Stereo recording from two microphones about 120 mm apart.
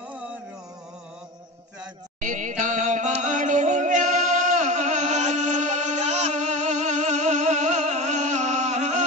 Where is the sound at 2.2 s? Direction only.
90° right.